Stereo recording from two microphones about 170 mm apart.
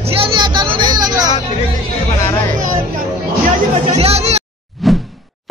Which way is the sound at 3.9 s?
40° right (ahead or behind).